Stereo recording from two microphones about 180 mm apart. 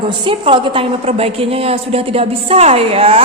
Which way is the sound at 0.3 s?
30° right (ahead or behind).